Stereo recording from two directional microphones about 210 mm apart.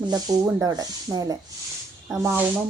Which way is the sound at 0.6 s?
15° right (ahead or behind).